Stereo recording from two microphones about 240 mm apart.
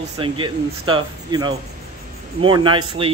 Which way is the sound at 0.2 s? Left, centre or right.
Right.